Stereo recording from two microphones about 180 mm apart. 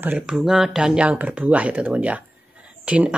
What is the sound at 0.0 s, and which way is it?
Speech, 5° right (ahead or behind).